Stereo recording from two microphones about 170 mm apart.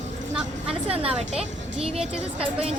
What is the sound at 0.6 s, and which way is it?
Speech, 35° right (ahead or behind).